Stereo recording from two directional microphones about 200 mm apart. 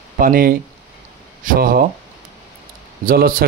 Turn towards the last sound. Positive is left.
turn(degrees=-45)  # may be behind; listen again after turning